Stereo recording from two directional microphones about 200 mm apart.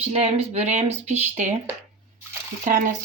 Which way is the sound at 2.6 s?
45° right (ahead or behind).